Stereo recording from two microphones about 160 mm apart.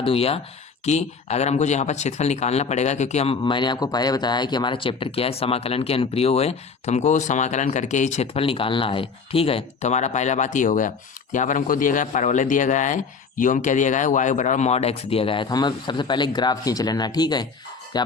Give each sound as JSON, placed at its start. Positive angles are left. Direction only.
{"t": 0.0, "sound": "speech", "side_deg": 35}
{"t": 3.4, "sound": "speech", "side_deg": 30}